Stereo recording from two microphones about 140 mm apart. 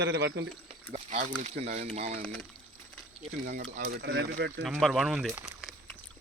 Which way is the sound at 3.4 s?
75° right (ahead or behind).